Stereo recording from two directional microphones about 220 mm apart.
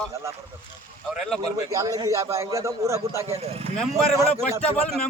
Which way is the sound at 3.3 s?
25° right (ahead or behind).